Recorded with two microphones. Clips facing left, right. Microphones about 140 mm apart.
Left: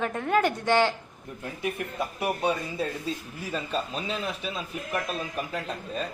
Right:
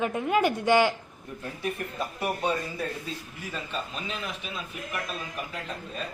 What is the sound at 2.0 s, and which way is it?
Speech, 15° left (ahead or behind).